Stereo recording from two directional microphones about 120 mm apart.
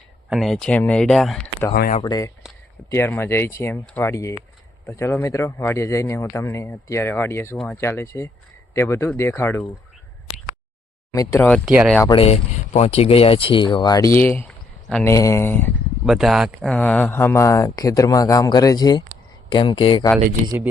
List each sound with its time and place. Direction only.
0.3 s speech: centre (ahead or behind)
2.0 s speech: 30° left (ahead or behind)
2.9 s speech: 20° left (ahead or behind)
7.5 s speech: 5° left (ahead or behind)
7.8 s speech: 20° left (ahead or behind)
11.1 s speech: 25° left (ahead or behind)
11.6 s speech: 10° right (ahead or behind)
12.1 s speech: 55° left (ahead or behind); by 14.4 s 20° left (ahead or behind)
14.4 s a sound: 5° left (ahead or behind)
15.0 s speech: 25° left (ahead or behind)
16.0 s speech: 5° right (ahead or behind)
16.6 s speech: 10° left (ahead or behind); by 20.1 s 40° left (ahead or behind)